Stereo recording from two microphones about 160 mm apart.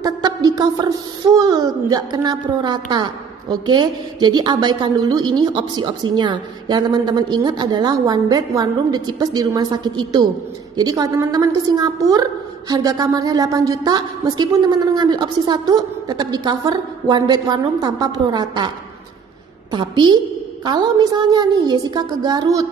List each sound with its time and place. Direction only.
0.0 s a woman's voice: 25° right (ahead or behind)
19.7 s a woman's voice: 30° right (ahead or behind)